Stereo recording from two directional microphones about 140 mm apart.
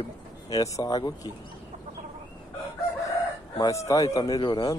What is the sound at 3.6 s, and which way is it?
A man's voice, 20° left (ahead or behind).